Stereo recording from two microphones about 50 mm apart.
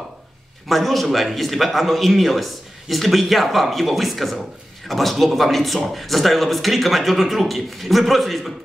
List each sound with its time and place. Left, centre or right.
0.7 s a man's voice: centre